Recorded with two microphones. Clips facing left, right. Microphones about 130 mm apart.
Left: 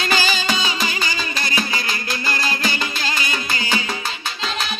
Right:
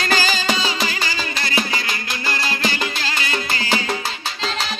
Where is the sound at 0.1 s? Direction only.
40° right (ahead or behind).